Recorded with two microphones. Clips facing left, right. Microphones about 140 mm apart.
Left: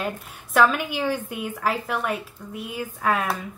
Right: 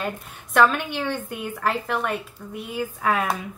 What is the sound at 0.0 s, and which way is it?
A woman's voice, centre (ahead or behind).